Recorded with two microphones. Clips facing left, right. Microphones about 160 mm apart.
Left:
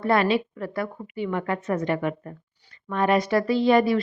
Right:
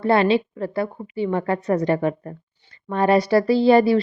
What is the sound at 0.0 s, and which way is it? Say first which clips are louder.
A woman's voice: right 4 dB; 30° right (ahead or behind).